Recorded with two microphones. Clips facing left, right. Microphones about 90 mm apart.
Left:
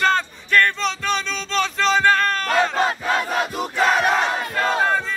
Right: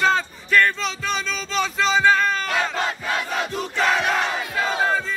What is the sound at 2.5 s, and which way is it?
Battle cry, 45° left (ahead or behind).